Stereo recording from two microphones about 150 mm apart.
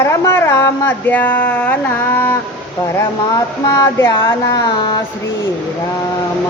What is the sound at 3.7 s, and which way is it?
A woman's voice, 20° left (ahead or behind).